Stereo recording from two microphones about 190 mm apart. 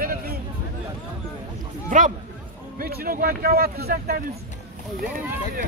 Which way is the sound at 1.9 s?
45° right (ahead or behind).